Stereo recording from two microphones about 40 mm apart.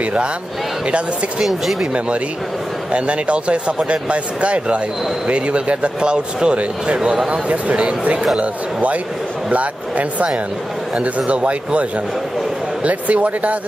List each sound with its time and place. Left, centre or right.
1.4 s speech: centre
2.9 s speech: right
9.5 s speech: right
12.8 s speech: right